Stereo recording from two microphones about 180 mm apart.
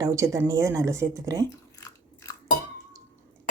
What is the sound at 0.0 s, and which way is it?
Speech, 15° right (ahead or behind).